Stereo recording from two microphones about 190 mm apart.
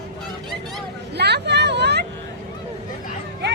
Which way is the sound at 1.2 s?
60° right (ahead or behind).